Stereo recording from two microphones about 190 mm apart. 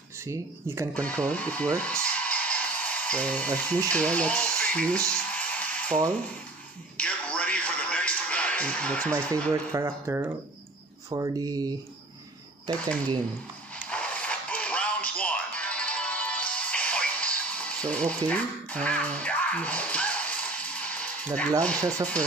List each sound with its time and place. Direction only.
0.2 s speech: 15° right (ahead or behind)
0.9 s speech: 5° left (ahead or behind)
7.0 s music: 5° left (ahead or behind)
9.5 s speech: 15° right (ahead or behind)
13.8 s music: 5° left (ahead or behind)
21.4 s speech: 5° left (ahead or behind)